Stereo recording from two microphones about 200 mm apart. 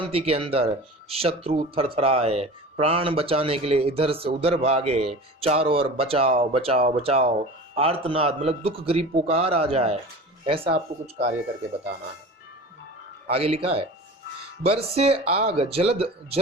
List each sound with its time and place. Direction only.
0.0 s speech: 30° right (ahead or behind)
13.2 s speech: 30° right (ahead or behind)